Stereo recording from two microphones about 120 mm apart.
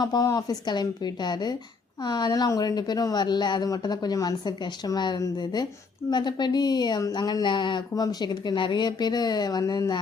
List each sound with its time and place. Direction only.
0.0 s speech: 35° left (ahead or behind)